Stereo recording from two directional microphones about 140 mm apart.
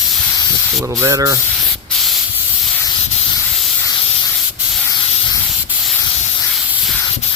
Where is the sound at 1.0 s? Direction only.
20° right (ahead or behind).